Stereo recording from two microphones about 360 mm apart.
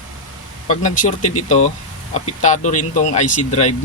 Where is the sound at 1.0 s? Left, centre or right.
Left.